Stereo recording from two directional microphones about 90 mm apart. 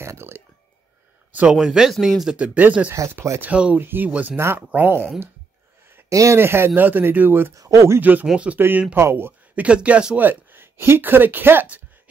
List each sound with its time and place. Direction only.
0.0 s a sound: 30° right (ahead or behind)
1.3 s speech: 15° right (ahead or behind)
1.6 s speech: 5° right (ahead or behind)
2.3 s speech: 15° right (ahead or behind)
2.9 s speech: 35° right (ahead or behind)
3.3 s speech: 15° right (ahead or behind)
4.4 s speech: 30° right (ahead or behind)
6.0 s speech: 35° right (ahead or behind)
7.5 s speech: 35° right (ahead or behind)
8.0 s speech: 20° right (ahead or behind)